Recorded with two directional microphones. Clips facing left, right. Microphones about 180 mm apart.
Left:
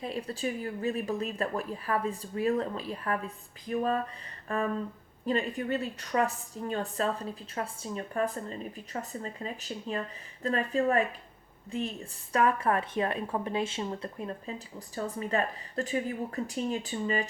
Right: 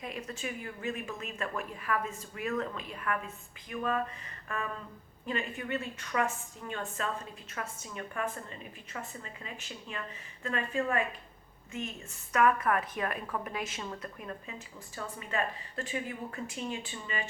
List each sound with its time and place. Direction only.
0.0 s a woman's voice: 30° left (ahead or behind)
4.4 s a sound: 35° left (ahead or behind)
5.2 s a woman's voice: 35° left (ahead or behind)